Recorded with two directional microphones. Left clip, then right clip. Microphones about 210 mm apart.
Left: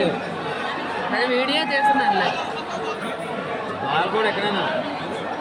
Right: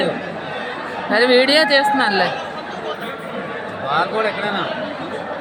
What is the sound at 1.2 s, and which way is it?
Speech, 25° right (ahead or behind).